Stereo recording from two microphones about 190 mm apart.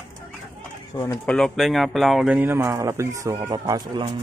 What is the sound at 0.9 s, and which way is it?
Speech, 20° left (ahead or behind).